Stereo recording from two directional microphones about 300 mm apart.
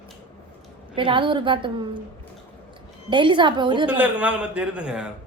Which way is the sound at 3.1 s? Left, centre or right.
Centre.